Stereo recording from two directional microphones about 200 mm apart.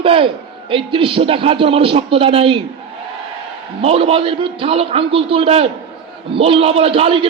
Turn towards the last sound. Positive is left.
turn(degrees=-30)  # may be behind; listen again after turning